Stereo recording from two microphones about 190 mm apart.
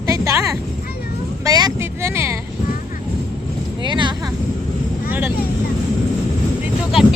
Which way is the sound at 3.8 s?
25° right (ahead or behind).